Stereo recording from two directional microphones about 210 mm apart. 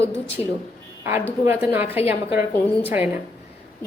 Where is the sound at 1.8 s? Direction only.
30° left (ahead or behind).